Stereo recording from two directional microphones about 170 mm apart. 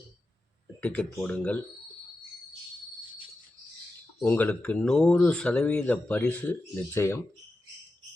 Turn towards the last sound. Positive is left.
turn(degrees=15)  # may be behind; listen again after turning